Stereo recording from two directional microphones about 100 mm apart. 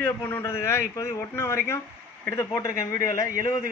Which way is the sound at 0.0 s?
25° left (ahead or behind).